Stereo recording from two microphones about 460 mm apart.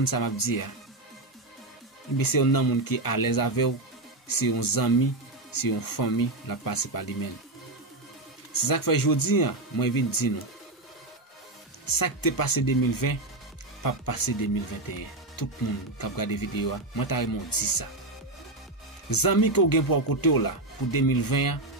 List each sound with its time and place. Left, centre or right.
0.0 s speech: left
2.1 s speech: left
8.5 s speech: left
11.8 s speech: left
19.0 s speech: left